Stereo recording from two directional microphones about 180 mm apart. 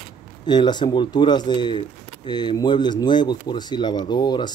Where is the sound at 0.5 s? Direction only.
25° left (ahead or behind).